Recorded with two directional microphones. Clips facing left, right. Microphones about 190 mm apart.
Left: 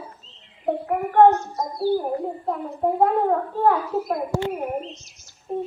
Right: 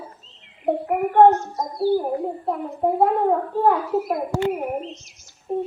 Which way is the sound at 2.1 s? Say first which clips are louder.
Right 1 dB; centre (ahead or behind).